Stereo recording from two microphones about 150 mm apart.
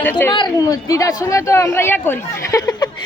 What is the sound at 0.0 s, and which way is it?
Speech, 10° left (ahead or behind).